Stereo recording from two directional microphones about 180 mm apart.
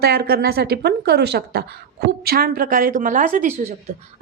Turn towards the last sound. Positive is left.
turn(degrees=-45)  # may be behind; listen again after turning